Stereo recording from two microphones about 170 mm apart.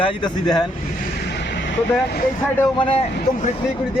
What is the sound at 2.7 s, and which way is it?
Speech, 30° left (ahead or behind).